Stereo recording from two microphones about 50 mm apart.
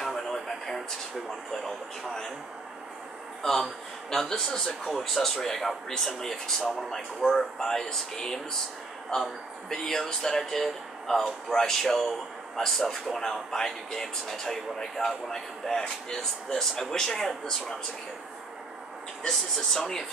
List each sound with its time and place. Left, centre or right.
0.1 s a sound: centre
3.4 s speech: centre
19.2 s speech: centre